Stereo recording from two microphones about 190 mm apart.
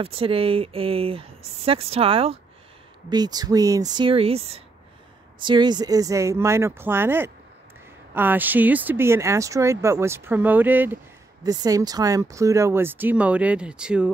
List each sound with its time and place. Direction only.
0.0 s speech: 30° right (ahead or behind); by 14.1 s 5° right (ahead or behind)